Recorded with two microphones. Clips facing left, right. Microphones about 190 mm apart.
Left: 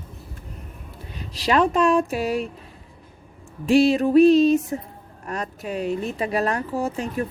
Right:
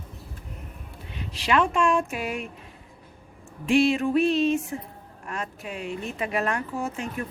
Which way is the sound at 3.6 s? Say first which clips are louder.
Left 4 dB; 35° left (ahead or behind).